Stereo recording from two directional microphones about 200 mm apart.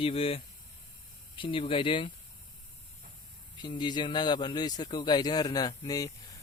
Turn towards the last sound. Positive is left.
turn(degrees=20)  # may be behind; listen again after turning